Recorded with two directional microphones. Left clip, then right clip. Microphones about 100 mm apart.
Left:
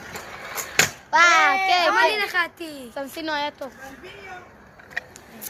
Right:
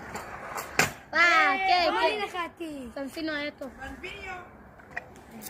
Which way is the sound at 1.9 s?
10° right (ahead or behind).